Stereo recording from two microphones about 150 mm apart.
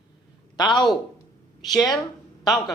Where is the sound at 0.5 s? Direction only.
30° left (ahead or behind).